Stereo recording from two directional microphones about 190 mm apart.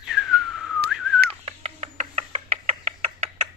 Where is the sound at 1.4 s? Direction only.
35° right (ahead or behind).